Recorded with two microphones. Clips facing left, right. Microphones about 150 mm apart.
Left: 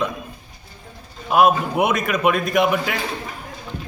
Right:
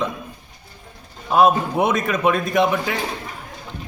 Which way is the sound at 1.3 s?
10° left (ahead or behind).